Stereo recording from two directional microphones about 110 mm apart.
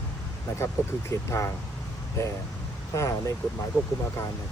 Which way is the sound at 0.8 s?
30° left (ahead or behind).